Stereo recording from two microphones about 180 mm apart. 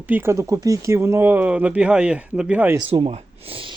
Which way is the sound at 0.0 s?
10° right (ahead or behind).